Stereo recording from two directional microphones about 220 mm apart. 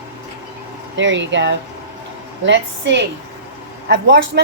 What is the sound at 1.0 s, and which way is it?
A woman's voice, 55° right (ahead or behind).